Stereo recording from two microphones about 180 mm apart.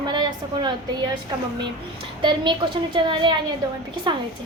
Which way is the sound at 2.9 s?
25° right (ahead or behind).